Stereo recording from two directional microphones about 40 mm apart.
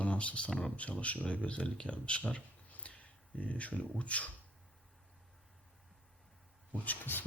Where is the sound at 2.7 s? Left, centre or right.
Left.